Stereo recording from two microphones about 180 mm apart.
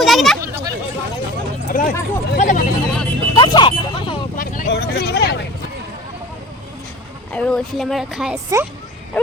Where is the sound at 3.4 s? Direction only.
25° left (ahead or behind).